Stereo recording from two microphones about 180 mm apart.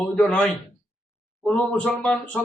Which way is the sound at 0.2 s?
5° left (ahead or behind).